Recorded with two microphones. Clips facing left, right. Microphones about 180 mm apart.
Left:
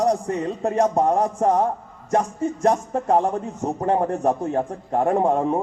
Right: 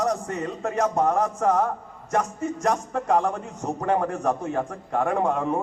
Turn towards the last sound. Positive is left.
turn(degrees=35)  # may be behind; listen again after turning